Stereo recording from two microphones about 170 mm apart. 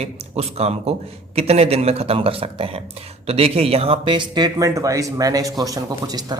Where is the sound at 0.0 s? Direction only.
40° right (ahead or behind).